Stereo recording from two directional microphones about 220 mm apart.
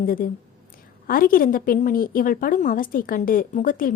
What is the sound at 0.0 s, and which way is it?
A woman's voice, 40° left (ahead or behind).